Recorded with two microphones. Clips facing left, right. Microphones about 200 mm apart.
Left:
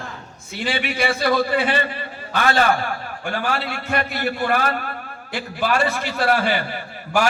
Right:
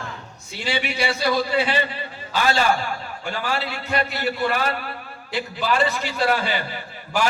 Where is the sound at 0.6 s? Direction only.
55° left (ahead or behind).